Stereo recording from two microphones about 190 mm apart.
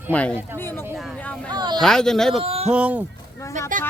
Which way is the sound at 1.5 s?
20° right (ahead or behind).